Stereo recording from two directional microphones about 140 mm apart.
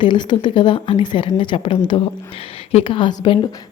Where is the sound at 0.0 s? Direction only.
35° left (ahead or behind).